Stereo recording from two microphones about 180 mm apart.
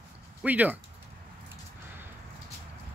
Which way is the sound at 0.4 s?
10° right (ahead or behind).